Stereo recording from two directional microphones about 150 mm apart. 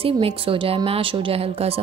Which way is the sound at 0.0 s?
40° right (ahead or behind).